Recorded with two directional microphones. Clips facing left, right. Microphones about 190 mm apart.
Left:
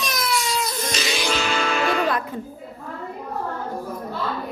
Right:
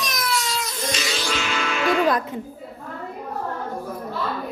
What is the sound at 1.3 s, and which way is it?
Music, 35° left (ahead or behind).